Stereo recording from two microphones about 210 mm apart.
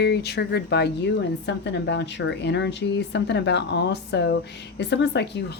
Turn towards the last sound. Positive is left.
turn(degrees=55)  # may be behind; listen again after turning